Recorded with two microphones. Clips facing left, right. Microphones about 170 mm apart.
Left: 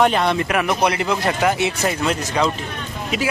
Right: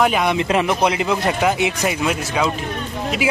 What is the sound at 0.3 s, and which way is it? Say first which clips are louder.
Speech: right 2 dB; 25° right (ahead or behind).